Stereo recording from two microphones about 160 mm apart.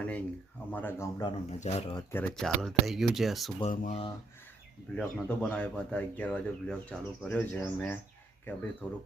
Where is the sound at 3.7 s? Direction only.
60° left (ahead or behind).